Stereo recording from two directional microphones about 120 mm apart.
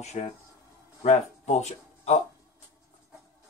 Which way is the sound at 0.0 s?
70° left (ahead or behind).